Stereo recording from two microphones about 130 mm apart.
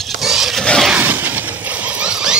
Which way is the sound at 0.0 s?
Centre (ahead or behind).